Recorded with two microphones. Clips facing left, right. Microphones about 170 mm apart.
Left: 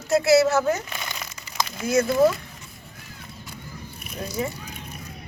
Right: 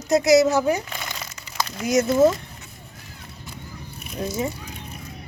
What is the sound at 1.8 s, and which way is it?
Speech, 20° right (ahead or behind).